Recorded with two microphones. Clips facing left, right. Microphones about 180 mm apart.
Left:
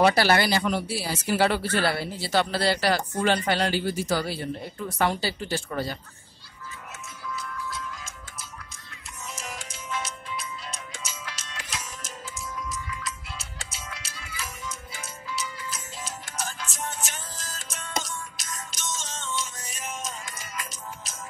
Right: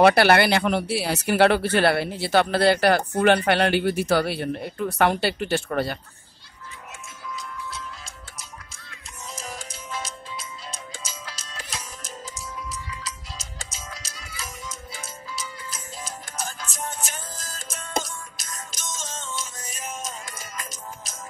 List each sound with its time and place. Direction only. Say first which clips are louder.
0.0 s speech: right 4 dB; 60° right (ahead or behind)
9.3 s music: right 3 dB; 35° right (ahead or behind)
13.8 s music: right 1 dB; 40° right (ahead or behind)
16.4 s music: right 1 dB; 40° right (ahead or behind)